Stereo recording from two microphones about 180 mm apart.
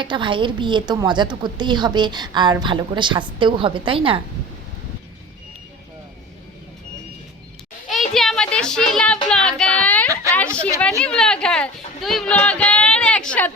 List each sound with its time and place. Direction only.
0.0 s a woman's voice: 25° right (ahead or behind)
8.1 s child singing: centre (ahead or behind)
10.3 s a sound: 5° left (ahead or behind)
11.0 s speech: 5° left (ahead or behind)